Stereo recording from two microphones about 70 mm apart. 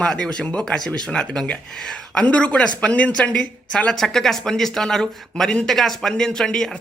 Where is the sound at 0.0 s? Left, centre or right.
Centre.